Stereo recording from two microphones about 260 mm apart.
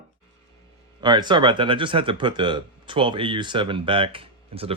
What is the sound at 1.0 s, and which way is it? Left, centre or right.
Speech, centre.